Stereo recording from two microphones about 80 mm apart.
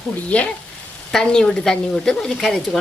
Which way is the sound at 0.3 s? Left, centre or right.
Centre.